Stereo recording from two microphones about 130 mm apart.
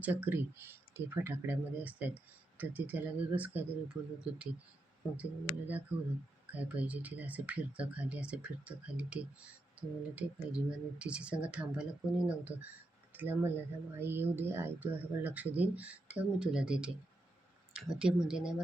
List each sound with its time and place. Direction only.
0.0 s speech: 15° right (ahead or behind)